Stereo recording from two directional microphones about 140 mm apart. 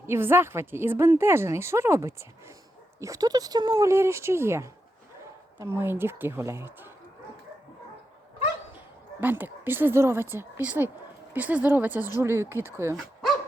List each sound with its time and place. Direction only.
0.0 s a woman's voice: 15° right (ahead or behind)
9.2 s a woman's voice: 15° right (ahead or behind)